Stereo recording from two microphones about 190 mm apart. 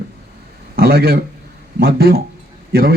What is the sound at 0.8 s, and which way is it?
A man's voice, 55° right (ahead or behind).